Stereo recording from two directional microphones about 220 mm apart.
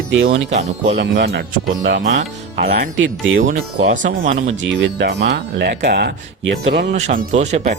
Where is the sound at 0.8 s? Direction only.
50° right (ahead or behind).